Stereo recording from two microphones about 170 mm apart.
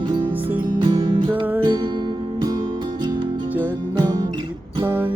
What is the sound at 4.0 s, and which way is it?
Music, 25° right (ahead or behind).